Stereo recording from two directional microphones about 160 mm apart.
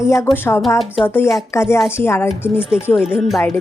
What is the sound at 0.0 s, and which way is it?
Speech, 20° left (ahead or behind).